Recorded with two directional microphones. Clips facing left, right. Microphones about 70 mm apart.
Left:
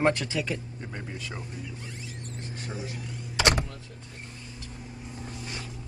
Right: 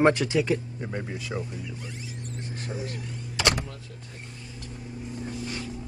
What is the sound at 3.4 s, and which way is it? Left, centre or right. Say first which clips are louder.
Power windows: left 1 dB; left.